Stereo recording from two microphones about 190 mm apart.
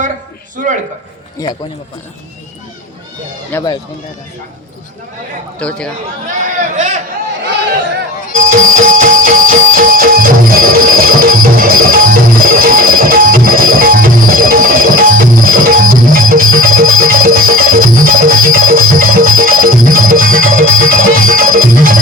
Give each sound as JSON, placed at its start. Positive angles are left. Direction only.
{"t": 0.5, "sound": "a man's voice", "side_deg": -45}
{"t": 1.4, "sound": "a man's voice", "side_deg": 20}
{"t": 3.5, "sound": "speech", "side_deg": 10}
{"t": 5.5, "sound": "speech", "side_deg": 5}
{"t": 6.6, "sound": "speech", "side_deg": -40}
{"t": 7.4, "sound": "speech", "side_deg": -60}
{"t": 8.4, "sound": "music", "side_deg": -45}